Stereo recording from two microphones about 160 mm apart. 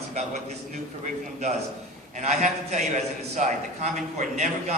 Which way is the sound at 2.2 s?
50° right (ahead or behind).